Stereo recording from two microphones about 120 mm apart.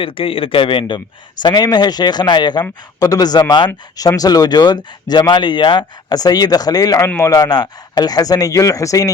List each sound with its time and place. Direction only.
0.0 s a man's voice: 50° left (ahead or behind); by 9.1 s 30° left (ahead or behind)